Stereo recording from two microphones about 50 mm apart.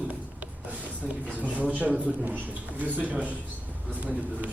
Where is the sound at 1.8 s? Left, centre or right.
Right.